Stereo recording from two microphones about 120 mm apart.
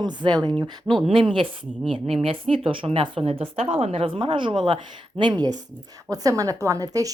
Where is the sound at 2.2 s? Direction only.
50° right (ahead or behind).